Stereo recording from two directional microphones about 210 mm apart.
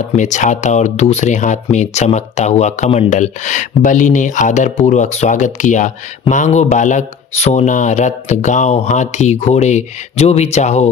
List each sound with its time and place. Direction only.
0.1 s speech: 35° left (ahead or behind)